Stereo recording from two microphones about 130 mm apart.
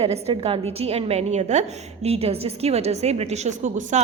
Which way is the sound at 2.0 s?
50° right (ahead or behind).